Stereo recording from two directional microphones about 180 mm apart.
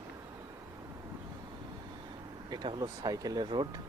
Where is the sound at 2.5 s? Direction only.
25° right (ahead or behind).